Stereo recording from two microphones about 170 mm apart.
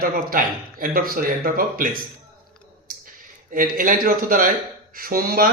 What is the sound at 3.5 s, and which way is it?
Speech, 55° right (ahead or behind).